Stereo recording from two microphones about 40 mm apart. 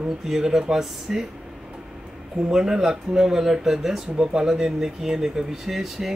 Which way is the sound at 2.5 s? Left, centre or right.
Centre.